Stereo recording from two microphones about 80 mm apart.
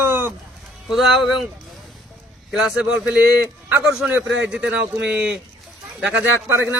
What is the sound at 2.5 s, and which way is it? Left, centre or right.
Speech, centre.